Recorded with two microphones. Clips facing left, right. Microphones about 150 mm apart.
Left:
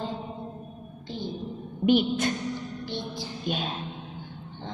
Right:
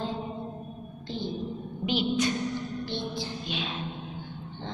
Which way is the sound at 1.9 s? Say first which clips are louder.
Left 4 dB; 50° left (ahead or behind).